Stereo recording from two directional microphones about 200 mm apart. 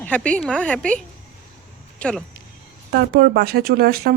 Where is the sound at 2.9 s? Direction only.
55° right (ahead or behind).